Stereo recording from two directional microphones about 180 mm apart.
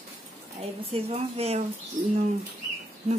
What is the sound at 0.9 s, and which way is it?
Speech, 35° right (ahead or behind).